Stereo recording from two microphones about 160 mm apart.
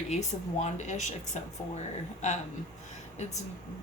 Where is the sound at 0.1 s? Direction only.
45° left (ahead or behind).